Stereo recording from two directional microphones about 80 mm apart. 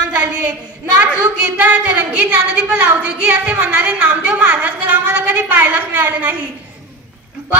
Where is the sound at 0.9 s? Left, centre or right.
Centre.